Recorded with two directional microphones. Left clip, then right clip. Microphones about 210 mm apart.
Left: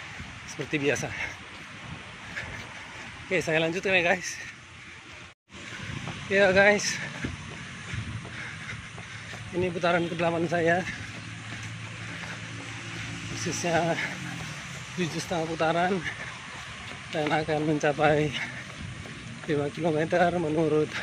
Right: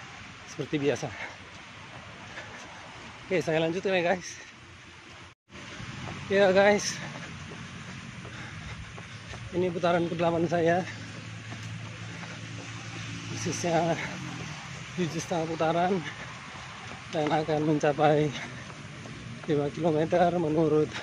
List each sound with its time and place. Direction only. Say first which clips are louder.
0.6 s speech: left 1 dB; 15° right (ahead or behind)
3.3 s speech: left 1 dB; 20° right (ahead or behind)
6.3 s speech: left 1 dB; 10° right (ahead or behind)
9.6 s speech: even; 5° right (ahead or behind)
13.4 s speech: left 1 dB; 10° right (ahead or behind)
17.3 s speech: even; 10° right (ahead or behind)
19.5 s speech: even; 10° right (ahead or behind)